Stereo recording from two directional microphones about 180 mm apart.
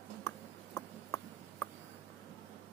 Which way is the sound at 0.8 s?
15° left (ahead or behind).